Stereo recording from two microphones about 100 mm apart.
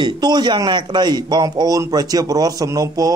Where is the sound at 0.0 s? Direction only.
45° right (ahead or behind).